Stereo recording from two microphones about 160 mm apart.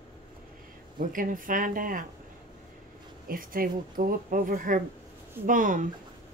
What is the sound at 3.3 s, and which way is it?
Speech, 60° right (ahead or behind).